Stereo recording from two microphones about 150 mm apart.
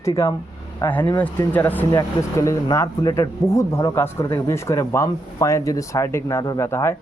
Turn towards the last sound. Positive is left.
turn(degrees=15)  # may be behind; listen again after turning